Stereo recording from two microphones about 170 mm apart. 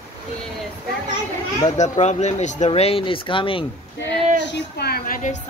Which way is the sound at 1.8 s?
40° left (ahead or behind).